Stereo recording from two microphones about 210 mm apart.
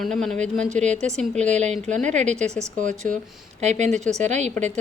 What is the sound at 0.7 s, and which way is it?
A woman's voice, 35° right (ahead or behind).